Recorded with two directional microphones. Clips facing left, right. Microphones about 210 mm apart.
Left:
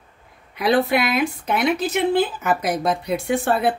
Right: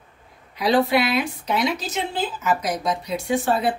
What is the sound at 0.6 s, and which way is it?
A woman's voice, 55° left (ahead or behind).